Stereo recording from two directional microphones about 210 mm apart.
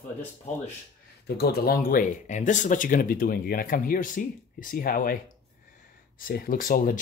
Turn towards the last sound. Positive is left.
turn(degrees=40)  # may be behind; listen again after turning